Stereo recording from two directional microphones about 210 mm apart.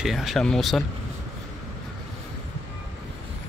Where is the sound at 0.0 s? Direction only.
Centre (ahead or behind).